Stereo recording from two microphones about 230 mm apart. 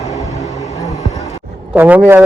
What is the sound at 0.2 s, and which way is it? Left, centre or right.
Vehicle, centre.